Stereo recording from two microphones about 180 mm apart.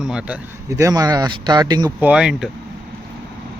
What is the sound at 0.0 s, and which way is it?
Speech, 5° right (ahead or behind).